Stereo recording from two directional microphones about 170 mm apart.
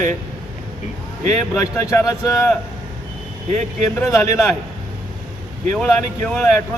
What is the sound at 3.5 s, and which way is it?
Speech, 40° right (ahead or behind).